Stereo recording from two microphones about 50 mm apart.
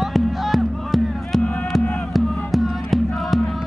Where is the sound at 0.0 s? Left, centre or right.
Centre.